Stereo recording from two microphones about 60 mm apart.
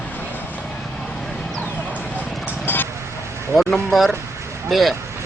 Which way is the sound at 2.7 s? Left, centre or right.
Left.